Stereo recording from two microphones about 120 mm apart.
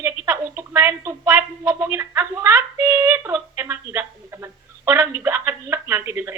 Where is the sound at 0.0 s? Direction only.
20° right (ahead or behind).